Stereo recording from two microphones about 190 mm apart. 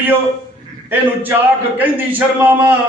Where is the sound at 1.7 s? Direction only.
10° right (ahead or behind).